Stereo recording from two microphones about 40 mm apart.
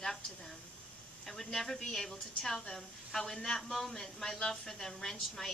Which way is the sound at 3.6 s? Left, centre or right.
Centre.